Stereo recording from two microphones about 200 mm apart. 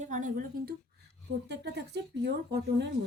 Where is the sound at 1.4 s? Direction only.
55° right (ahead or behind).